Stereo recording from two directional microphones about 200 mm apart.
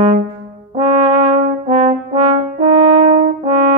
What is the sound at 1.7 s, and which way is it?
French horn, 30° right (ahead or behind).